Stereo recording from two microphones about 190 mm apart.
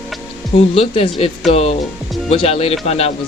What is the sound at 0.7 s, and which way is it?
Speech, 30° left (ahead or behind).